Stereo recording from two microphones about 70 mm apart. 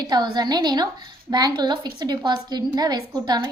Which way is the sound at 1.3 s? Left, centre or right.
Right.